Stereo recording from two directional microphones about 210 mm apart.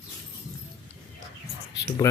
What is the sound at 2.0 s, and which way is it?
Speech, 15° left (ahead or behind).